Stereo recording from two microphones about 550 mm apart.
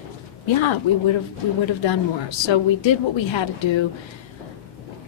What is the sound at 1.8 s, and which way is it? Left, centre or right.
A woman's voice, left.